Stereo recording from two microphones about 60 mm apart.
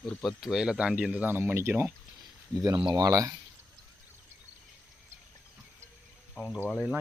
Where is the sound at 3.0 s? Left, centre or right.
Right.